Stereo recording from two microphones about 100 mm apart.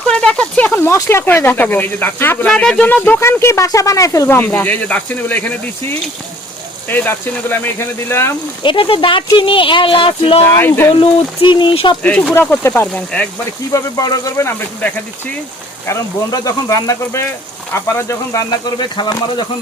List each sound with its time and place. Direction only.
0.1 s speech: 10° left (ahead or behind)
0.9 s speech: 30° left (ahead or behind)
2.5 s speech: 5° left (ahead or behind)
3.2 s speech: 25° left (ahead or behind)
4.3 s speech: 20° left (ahead or behind)
8.6 s speech: 60° left (ahead or behind)
12.0 s speech: 15° left (ahead or behind)
12.3 s speech: 25° left (ahead or behind)
13.7 s speech: 35° left (ahead or behind)
16.3 s speech: 35° left (ahead or behind)